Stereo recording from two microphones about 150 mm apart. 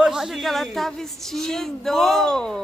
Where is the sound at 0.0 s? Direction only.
5° right (ahead or behind).